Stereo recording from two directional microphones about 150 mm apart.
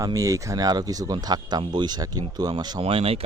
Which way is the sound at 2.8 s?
40° right (ahead or behind).